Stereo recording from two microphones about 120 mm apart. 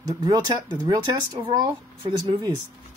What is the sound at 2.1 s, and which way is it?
Speech, 45° right (ahead or behind).